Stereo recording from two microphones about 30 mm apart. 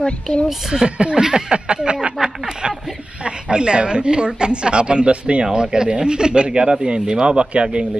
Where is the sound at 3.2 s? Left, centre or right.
Right.